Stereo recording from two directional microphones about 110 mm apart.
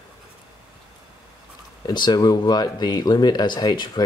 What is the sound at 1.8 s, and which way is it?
Speech, 40° left (ahead or behind).